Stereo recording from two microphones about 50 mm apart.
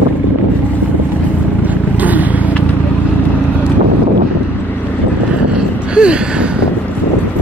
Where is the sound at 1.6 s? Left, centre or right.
Right.